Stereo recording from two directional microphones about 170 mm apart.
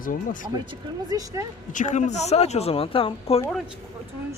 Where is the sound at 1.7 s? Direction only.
45° left (ahead or behind).